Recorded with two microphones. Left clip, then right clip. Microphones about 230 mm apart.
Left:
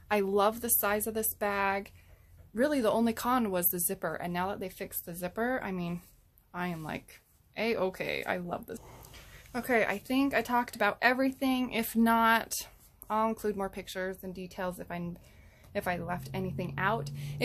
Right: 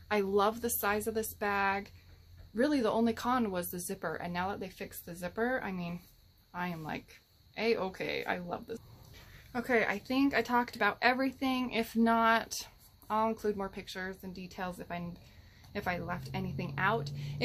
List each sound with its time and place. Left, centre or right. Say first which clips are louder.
0.1 s a woman's voice: left 2 dB; left